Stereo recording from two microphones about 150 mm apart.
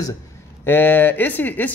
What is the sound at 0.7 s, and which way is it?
Speech, 15° left (ahead or behind).